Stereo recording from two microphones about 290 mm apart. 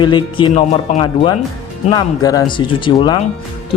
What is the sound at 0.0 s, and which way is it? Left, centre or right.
Speech, centre.